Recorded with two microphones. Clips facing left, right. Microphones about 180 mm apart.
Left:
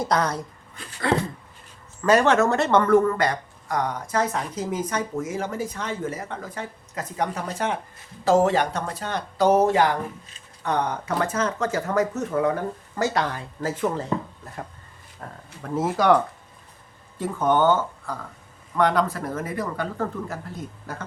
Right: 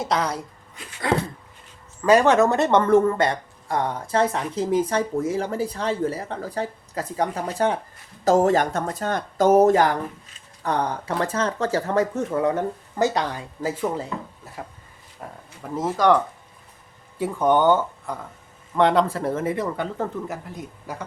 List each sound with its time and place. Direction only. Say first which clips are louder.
2.0 s speech: right 2 dB; 15° right (ahead or behind)
15.2 s speech: right 1 dB; 10° right (ahead or behind)
15.7 s speech: even; 5° left (ahead or behind)
17.2 s speech: right 2 dB; 15° right (ahead or behind)